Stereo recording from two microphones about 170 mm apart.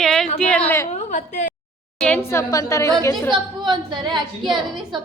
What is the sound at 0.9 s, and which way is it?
Speech, 45° left (ahead or behind).